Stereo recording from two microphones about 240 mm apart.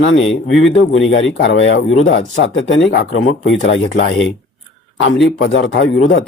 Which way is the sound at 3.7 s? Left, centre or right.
Left.